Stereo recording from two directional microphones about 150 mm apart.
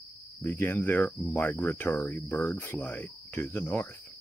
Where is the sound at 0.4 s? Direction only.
15° left (ahead or behind).